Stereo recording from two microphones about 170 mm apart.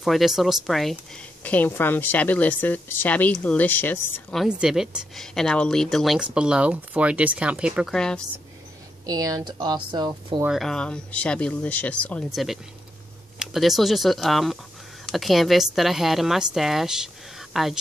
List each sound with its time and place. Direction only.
0.0 s a woman's voice: centre (ahead or behind)
4.4 s a woman's voice: 5° right (ahead or behind)
9.0 s speech: 20° right (ahead or behind)
10.4 s a woman's voice: centre (ahead or behind)
13.4 s a woman's voice: centre (ahead or behind)